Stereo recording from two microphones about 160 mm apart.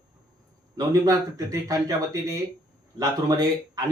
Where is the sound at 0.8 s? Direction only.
20° right (ahead or behind).